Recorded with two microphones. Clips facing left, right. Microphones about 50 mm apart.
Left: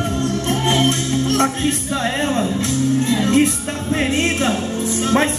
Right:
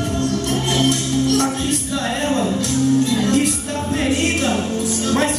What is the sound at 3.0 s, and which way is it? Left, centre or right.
Music, left.